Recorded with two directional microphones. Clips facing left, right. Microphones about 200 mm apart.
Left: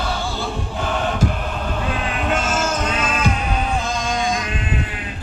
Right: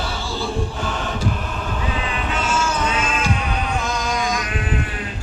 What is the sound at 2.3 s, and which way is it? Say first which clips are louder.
Music: left 2 dB; 45° left (ahead or behind).